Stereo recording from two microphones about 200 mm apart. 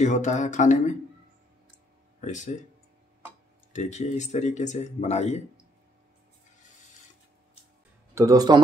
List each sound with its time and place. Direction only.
0.0 s speech: 35° left (ahead or behind)
2.1 s speech: 35° left (ahead or behind)
3.7 s speech: 35° left (ahead or behind)
8.1 s speech: 15° right (ahead or behind)